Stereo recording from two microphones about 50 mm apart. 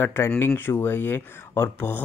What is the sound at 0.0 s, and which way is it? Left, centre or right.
Speech, left.